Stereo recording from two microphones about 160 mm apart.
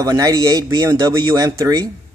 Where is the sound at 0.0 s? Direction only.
20° right (ahead or behind).